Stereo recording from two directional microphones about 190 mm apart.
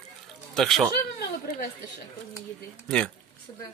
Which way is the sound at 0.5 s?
Centre (ahead or behind).